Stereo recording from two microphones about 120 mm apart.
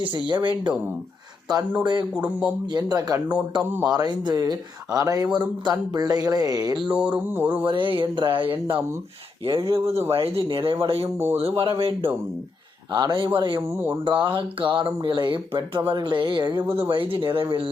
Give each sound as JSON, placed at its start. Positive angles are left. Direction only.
{"t": 0.0, "sound": "speech", "side_deg": -40}
{"t": 1.8, "sound": "speech", "side_deg": -35}
{"t": 2.1, "sound": "speech", "side_deg": -10}
{"t": 2.7, "sound": "speech", "side_deg": -30}
{"t": 3.7, "sound": "speech", "side_deg": -15}
{"t": 3.9, "sound": "speech", "side_deg": -35}
{"t": 6.9, "sound": "speech", "side_deg": -10}
{"t": 7.6, "sound": "speech", "side_deg": -40}
{"t": 12.9, "sound": "speech", "side_deg": -40}
{"t": 13.6, "sound": "speech", "side_deg": -20}
{"t": 14.0, "sound": "speech", "side_deg": -45}